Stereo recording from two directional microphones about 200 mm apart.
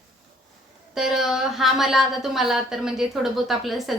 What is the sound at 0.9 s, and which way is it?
A woman's voice, centre (ahead or behind).